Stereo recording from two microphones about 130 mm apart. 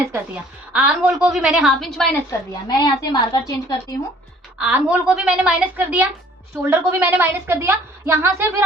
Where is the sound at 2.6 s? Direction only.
35° left (ahead or behind).